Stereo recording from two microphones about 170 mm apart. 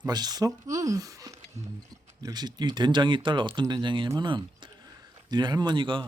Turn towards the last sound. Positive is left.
turn(degrees=-30)  # may be behind; listen again after turning